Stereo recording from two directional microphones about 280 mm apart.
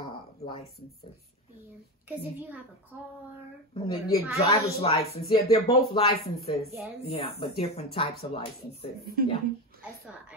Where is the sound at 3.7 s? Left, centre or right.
Left.